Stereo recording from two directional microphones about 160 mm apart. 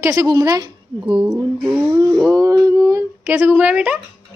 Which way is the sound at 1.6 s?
10° right (ahead or behind).